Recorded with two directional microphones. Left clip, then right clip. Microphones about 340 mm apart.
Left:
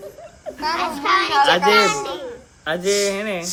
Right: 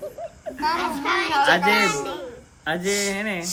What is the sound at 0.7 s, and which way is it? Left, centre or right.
Speech, left.